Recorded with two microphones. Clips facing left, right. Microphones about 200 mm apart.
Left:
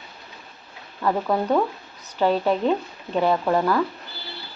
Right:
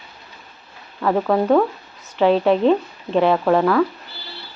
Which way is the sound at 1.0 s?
55° right (ahead or behind).